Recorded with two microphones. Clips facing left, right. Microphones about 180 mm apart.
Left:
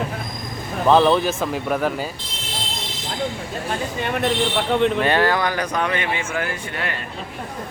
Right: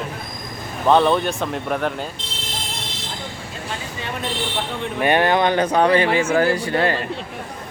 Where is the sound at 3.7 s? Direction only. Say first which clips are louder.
Left 5 dB; 60° left (ahead or behind).